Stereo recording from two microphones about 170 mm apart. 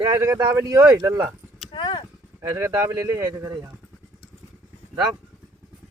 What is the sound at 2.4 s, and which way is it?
Speech, 20° right (ahead or behind).